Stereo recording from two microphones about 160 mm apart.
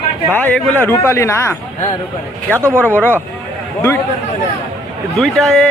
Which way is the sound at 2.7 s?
10° left (ahead or behind).